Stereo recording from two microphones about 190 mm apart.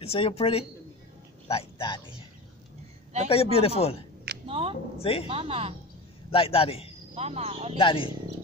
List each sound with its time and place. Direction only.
0.0 s speech: 30° left (ahead or behind)
3.3 s speech: 30° left (ahead or behind)
4.5 s a sound: 30° right (ahead or behind)
5.3 s speech: 30° right (ahead or behind)
6.3 s a man's voice: 30° left (ahead or behind)
7.2 s speech: 35° right (ahead or behind)
7.7 s a man's voice: 30° left (ahead or behind)